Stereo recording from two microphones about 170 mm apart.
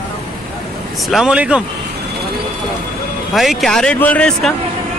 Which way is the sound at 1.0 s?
5° right (ahead or behind).